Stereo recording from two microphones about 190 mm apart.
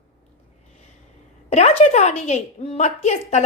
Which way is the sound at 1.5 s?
35° left (ahead or behind).